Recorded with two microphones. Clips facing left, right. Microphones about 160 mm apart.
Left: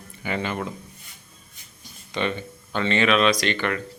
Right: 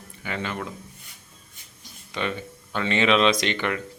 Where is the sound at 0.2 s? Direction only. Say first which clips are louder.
Left 3 dB; 5° left (ahead or behind).